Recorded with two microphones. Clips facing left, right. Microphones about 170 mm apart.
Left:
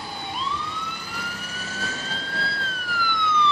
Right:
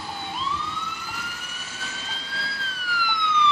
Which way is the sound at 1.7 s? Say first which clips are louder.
Left 6 dB; 45° left (ahead or behind).